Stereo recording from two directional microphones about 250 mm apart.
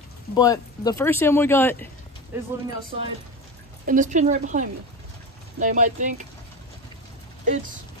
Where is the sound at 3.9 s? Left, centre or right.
Right.